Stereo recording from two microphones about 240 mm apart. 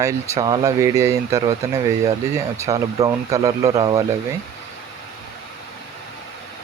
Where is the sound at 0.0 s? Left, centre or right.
Centre.